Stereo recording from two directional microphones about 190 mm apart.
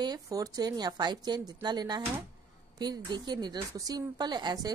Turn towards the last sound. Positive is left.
turn(degrees=-20)  # may be behind; listen again after turning